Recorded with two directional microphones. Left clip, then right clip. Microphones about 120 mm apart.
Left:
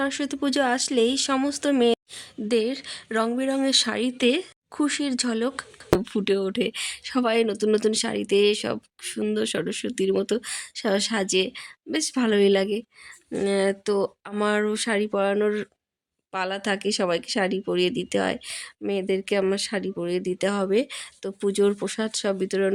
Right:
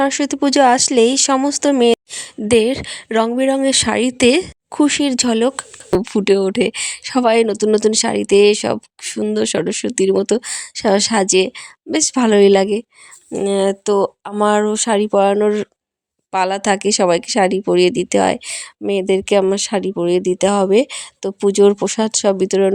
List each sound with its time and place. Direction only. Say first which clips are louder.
0.0 s a woman's voice: right 10 dB; 45° right (ahead or behind)